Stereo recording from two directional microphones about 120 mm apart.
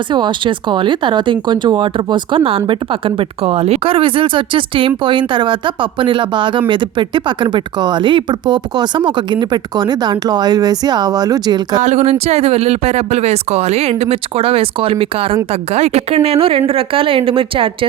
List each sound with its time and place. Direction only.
0.1 s speech: 40° right (ahead or behind)
11.8 s speech: 65° right (ahead or behind); by 15.4 s 50° right (ahead or behind)
15.7 s speech: 65° right (ahead or behind); by 17.8 s 45° right (ahead or behind)